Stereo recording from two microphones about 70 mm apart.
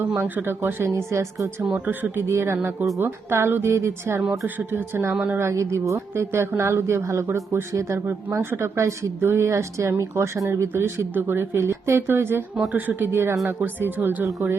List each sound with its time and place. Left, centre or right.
0.2 s a woman's voice: right
1.9 s speech: right
5.5 s a woman's voice: right